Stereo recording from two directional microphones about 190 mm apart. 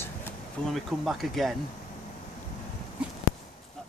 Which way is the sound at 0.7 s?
Centre (ahead or behind).